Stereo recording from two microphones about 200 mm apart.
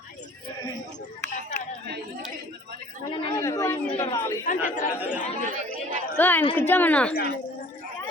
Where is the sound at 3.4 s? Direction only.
15° left (ahead or behind).